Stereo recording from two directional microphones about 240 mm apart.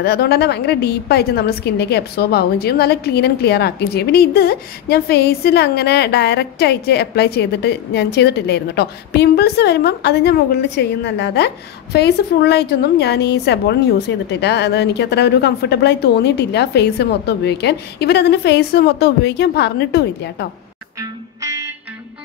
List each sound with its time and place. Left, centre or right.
0.0 s a woman's voice: left
21.4 s music: centre